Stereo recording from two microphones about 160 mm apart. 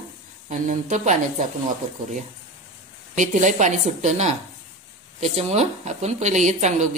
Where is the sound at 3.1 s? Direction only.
50° right (ahead or behind).